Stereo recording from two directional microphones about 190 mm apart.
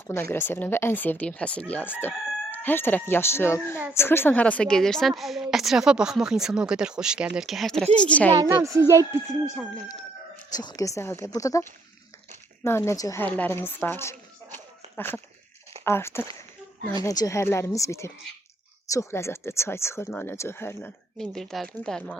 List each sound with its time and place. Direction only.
0.1 s a woman's voice: 15° left (ahead or behind)
8.3 s speech: 20° right (ahead or behind)
10.5 s speech: 20° left (ahead or behind)
21.2 s a woman's voice: centre (ahead or behind)